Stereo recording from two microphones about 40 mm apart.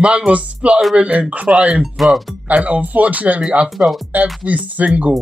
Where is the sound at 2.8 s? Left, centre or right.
Right.